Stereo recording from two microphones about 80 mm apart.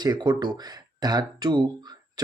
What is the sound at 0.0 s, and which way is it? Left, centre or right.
Speech, right.